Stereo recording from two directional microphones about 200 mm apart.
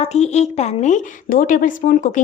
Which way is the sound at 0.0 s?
35° left (ahead or behind).